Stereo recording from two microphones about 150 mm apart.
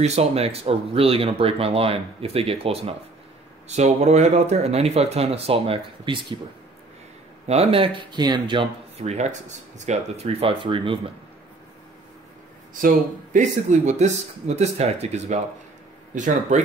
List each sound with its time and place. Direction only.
0.0 s speech: 45° right (ahead or behind)
7.4 s speech: 40° right (ahead or behind)
9.0 s speech: 50° right (ahead or behind)
9.8 s speech: 40° right (ahead or behind)
12.8 s speech: 55° right (ahead or behind)